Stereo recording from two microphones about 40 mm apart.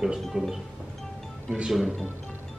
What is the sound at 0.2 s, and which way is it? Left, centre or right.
Speech, centre.